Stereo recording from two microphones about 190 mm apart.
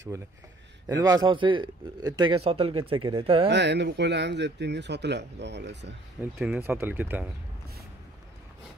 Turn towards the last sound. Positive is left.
turn(degrees=-10)  # may be behind; listen again after turning